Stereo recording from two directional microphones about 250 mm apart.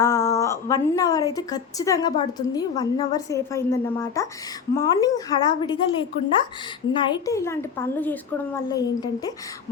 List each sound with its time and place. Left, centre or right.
0.0 s a woman's voice: centre